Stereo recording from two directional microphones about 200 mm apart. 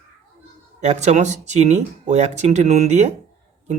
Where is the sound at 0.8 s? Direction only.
35° right (ahead or behind).